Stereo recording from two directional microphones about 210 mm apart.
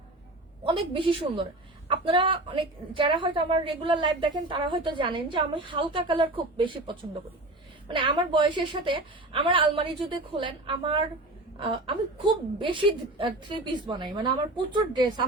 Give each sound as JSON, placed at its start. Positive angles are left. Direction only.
{"t": 0.6, "sound": "a man's voice", "side_deg": -25}